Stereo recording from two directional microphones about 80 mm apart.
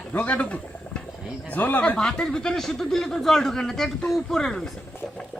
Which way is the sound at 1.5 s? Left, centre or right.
Left.